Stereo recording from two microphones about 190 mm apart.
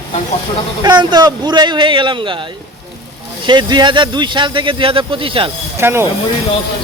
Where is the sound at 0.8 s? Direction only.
20° right (ahead or behind).